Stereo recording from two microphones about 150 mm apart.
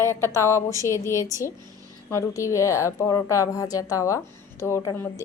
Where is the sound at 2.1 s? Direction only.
20° left (ahead or behind).